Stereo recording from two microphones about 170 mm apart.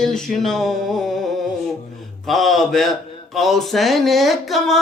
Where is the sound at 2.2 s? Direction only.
Centre (ahead or behind).